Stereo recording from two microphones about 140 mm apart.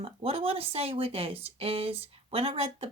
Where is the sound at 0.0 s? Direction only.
45° right (ahead or behind).